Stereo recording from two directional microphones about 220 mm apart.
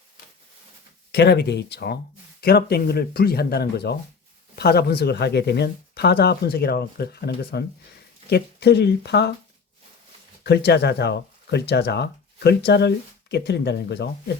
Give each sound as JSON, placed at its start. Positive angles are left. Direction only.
{"t": 1.1, "sound": "speech", "side_deg": 50}
{"t": 10.4, "sound": "speech", "side_deg": 50}